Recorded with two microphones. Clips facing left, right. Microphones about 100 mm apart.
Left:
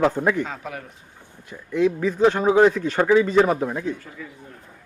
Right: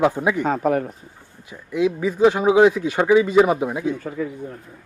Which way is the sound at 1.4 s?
10° right (ahead or behind).